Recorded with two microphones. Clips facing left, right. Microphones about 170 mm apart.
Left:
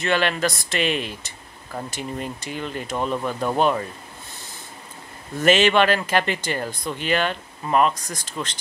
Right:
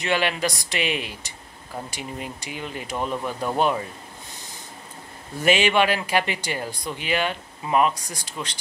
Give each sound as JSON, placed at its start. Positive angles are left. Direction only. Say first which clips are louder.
{"t": 0.0, "sound": "speech", "louder": "left 2 dB", "side_deg": -15}
{"t": 5.4, "sound": "speech", "louder": "left 3 dB", "side_deg": -10}